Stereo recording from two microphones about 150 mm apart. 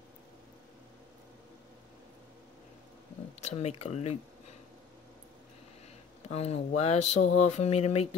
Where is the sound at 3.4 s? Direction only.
45° left (ahead or behind).